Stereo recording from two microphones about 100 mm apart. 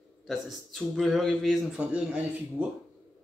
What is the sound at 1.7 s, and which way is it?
Speech, 10° right (ahead or behind).